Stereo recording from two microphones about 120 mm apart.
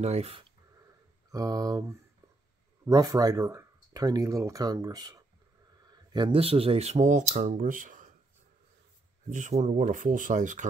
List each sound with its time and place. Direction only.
0.0 s speech: 60° right (ahead or behind)
1.3 s speech: 30° right (ahead or behind); by 8.1 s 90° right
9.3 s speech: 85° right